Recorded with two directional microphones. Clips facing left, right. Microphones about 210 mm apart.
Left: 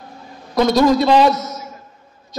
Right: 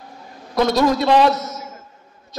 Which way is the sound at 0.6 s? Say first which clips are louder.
Left 3 dB; 5° right (ahead or behind).